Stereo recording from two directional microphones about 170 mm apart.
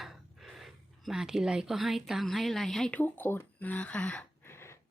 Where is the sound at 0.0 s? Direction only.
Centre (ahead or behind).